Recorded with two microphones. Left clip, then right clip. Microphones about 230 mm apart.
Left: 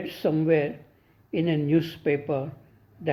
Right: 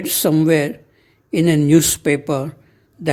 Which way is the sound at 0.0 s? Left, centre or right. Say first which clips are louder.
Right 9 dB; right.